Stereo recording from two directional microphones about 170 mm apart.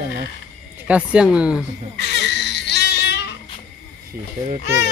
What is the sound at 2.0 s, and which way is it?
Baby cry, 80° left.